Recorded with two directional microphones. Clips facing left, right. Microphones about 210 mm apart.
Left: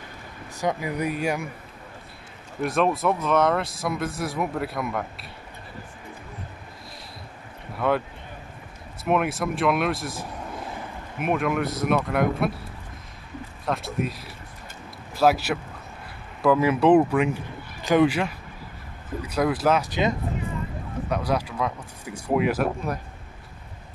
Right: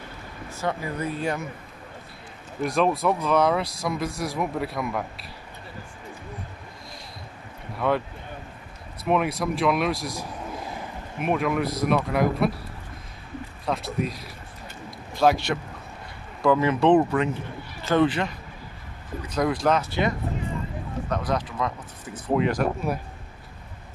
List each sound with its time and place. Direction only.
0.5 s speech: 15° left (ahead or behind)
2.6 s speech: centre (ahead or behind)
7.7 s a sound: centre (ahead or behind)
9.0 s speech: centre (ahead or behind)
13.7 s speech: centre (ahead or behind)
19.9 s speech: 20° left (ahead or behind)